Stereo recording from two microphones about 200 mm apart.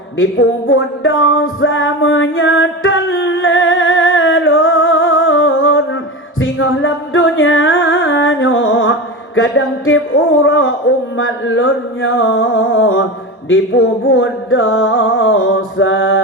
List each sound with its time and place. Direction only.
0.2 s music: 75° left (ahead or behind)
10.4 s a sound: 80° left
11.2 s music: 80° left